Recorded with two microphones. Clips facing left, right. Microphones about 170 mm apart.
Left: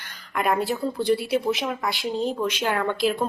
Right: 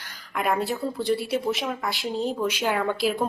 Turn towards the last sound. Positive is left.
turn(degrees=-5)  # may be behind; listen again after turning